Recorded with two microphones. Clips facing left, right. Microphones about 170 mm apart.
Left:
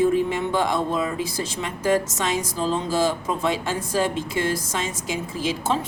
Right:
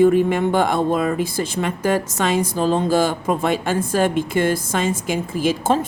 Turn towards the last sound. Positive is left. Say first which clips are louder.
# right 6 dB
turn(degrees=-50)  # may be behind; listen again after turning